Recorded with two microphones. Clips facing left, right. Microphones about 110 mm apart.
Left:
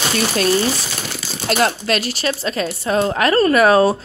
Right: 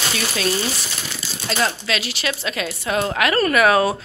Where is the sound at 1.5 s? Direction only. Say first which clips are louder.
Left 5 dB; 50° left (ahead or behind); by 3.9 s 35° left (ahead or behind).